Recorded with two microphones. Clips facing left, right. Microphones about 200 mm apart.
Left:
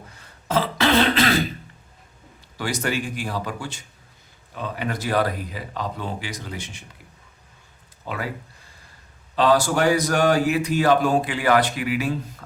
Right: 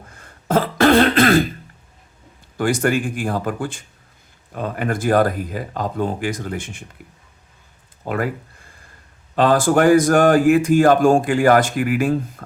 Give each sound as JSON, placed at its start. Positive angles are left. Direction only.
{"t": 0.1, "sound": "throat clearing", "side_deg": -50}
{"t": 2.6, "sound": "speech", "side_deg": -50}
{"t": 8.0, "sound": "speech", "side_deg": -50}
{"t": 9.3, "sound": "speech", "side_deg": -50}